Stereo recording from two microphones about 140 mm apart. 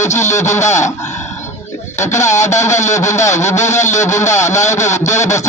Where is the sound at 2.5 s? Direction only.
55° left (ahead or behind).